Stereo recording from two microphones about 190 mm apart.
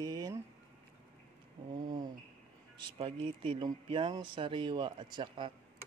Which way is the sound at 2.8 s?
30° right (ahead or behind).